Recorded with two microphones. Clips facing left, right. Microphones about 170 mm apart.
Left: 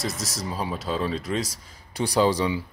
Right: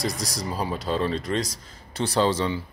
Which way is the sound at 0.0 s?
5° left (ahead or behind).